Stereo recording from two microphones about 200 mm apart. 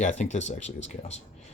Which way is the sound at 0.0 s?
35° left (ahead or behind).